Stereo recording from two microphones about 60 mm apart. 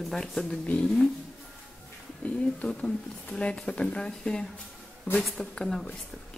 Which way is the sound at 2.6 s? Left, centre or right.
Centre.